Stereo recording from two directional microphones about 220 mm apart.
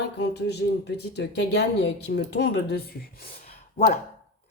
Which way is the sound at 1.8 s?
50° left (ahead or behind).